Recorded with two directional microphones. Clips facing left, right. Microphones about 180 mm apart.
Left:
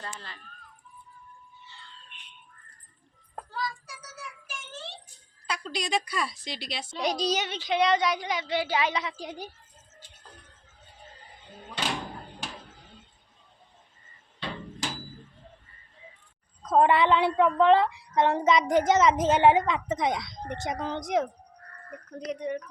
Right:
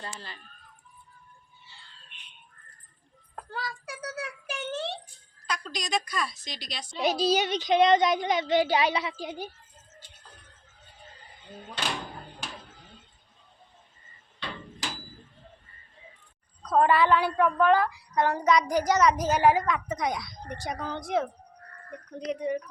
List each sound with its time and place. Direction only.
0.0 s speech: 30° right (ahead or behind)
3.5 s a sound: 60° right (ahead or behind)
5.5 s a woman's voice: 30° left (ahead or behind)
6.9 s a woman's voice: 5° right (ahead or behind)
16.6 s a woman's voice: 20° left (ahead or behind)
22.3 s speech: 5° right (ahead or behind)